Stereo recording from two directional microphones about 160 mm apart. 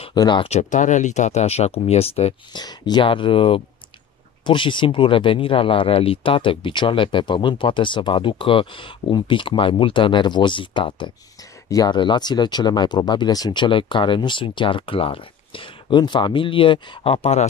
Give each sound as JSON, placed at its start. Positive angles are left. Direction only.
{"t": 0.0, "sound": "speech", "side_deg": 25}
{"t": 0.5, "sound": "speech", "side_deg": 50}
{"t": 2.5, "sound": "speech", "side_deg": 25}